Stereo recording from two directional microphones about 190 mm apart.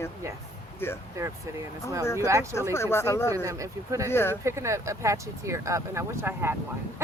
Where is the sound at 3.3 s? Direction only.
15° right (ahead or behind).